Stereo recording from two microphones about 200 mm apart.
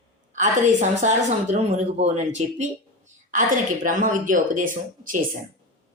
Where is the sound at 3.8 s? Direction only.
40° right (ahead or behind).